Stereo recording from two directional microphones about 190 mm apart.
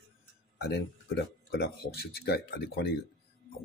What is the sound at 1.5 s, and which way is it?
Speech, 55° left (ahead or behind).